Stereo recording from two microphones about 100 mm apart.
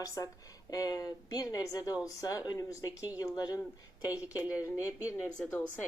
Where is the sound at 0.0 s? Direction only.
35° left (ahead or behind).